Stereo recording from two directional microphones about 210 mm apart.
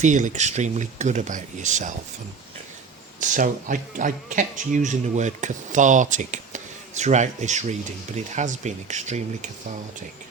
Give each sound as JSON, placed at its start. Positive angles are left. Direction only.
{"t": 0.0, "sound": "a man's voice", "side_deg": -35}
{"t": 3.2, "sound": "a man's voice", "side_deg": -35}